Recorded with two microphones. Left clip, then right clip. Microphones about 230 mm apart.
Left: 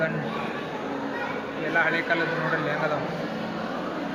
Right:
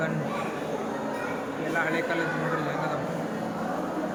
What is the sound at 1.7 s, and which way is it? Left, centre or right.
Speech, centre.